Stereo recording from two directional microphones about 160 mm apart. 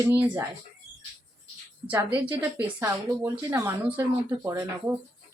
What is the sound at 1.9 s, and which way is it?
Speech, 10° right (ahead or behind).